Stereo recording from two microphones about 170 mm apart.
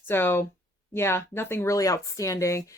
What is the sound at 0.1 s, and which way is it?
Speech, 15° left (ahead or behind).